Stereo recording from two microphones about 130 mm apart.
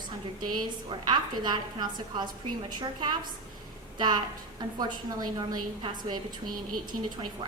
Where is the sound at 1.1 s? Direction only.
35° right (ahead or behind).